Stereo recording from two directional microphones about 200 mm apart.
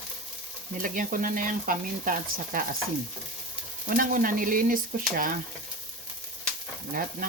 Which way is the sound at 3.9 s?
45° right (ahead or behind).